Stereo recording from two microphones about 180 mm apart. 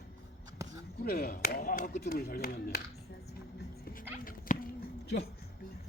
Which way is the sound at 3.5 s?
55° left (ahead or behind).